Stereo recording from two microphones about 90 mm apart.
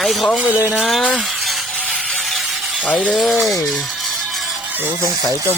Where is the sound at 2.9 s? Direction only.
15° left (ahead or behind).